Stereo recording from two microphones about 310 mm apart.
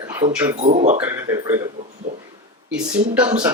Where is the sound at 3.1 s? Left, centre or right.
Centre.